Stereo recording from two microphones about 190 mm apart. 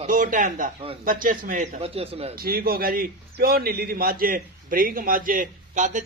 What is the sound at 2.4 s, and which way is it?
A man's voice, 50° right (ahead or behind).